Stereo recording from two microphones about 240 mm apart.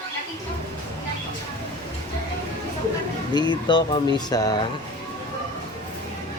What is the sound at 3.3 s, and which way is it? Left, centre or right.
Speech, centre.